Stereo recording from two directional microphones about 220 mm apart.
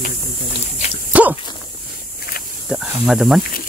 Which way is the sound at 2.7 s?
Centre (ahead or behind).